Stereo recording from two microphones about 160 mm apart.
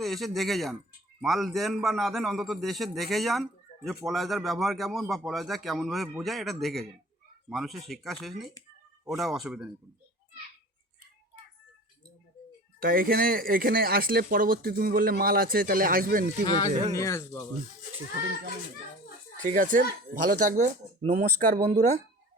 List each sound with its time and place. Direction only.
0.0 s a man's voice: centre (ahead or behind)
12.8 s speech: 65° right (ahead or behind)
16.5 s speech: 25° left (ahead or behind)
19.4 s speech: 55° right (ahead or behind)